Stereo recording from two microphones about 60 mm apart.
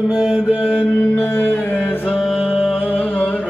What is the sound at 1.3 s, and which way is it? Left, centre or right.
Music, left.